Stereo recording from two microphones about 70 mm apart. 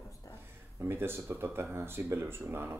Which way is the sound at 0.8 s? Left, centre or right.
Right.